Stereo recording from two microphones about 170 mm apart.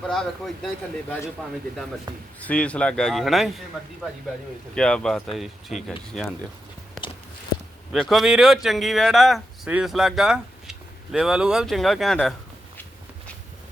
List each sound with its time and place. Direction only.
0.1 s speech: centre (ahead or behind)
2.1 s speech: 25° right (ahead or behind)
2.4 s speech: 10° left (ahead or behind)
4.7 s speech: 5° left (ahead or behind)
7.9 s speech: centre (ahead or behind)